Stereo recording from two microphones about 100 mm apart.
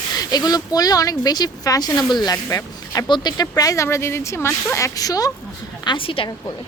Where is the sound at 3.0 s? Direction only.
50° left (ahead or behind).